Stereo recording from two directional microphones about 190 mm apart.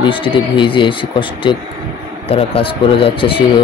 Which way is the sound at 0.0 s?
25° left (ahead or behind).